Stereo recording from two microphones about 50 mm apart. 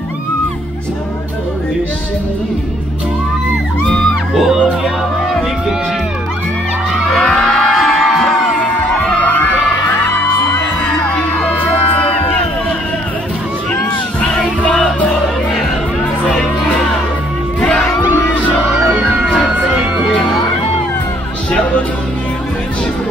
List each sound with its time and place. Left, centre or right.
7.2 s music: left
7.7 s music: centre
9.2 s music: left
11.1 s music: left
14.2 s music: left
18.9 s music: right